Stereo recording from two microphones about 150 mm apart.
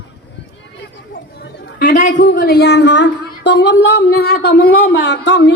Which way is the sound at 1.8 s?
60° left (ahead or behind).